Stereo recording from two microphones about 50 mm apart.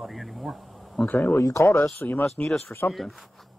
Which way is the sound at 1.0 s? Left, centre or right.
Left.